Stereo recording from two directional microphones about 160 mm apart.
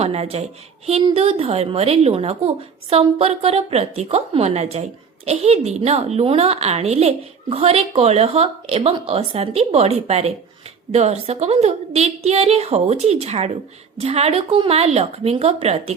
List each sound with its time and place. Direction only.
0.0 s a woman's voice: 40° right (ahead or behind)